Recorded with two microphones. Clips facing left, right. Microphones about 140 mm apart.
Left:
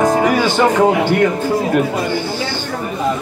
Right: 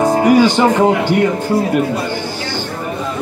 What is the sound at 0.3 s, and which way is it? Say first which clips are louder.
Speech: right 4 dB; 15° right (ahead or behind).